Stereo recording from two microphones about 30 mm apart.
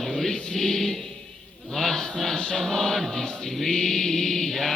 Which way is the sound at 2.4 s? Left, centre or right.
Centre.